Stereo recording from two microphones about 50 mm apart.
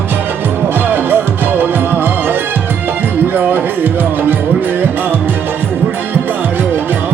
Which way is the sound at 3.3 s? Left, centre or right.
Right.